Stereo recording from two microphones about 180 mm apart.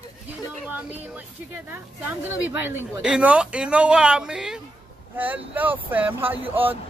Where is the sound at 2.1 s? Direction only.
10° right (ahead or behind).